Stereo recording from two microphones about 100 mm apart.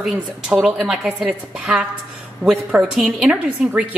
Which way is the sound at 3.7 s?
15° right (ahead or behind).